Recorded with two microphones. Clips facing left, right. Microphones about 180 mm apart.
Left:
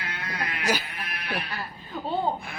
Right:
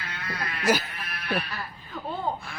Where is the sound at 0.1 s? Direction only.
15° left (ahead or behind).